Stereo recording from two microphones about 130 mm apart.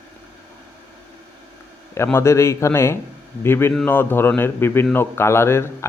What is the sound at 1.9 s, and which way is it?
Speech, 20° left (ahead or behind).